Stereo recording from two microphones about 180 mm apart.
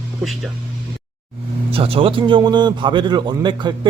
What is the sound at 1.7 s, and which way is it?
A man's voice, 30° right (ahead or behind).